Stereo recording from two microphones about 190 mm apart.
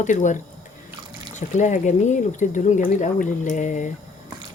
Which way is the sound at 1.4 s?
40° left (ahead or behind).